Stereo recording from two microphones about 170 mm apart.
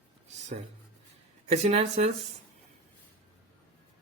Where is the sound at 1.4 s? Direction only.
35° right (ahead or behind).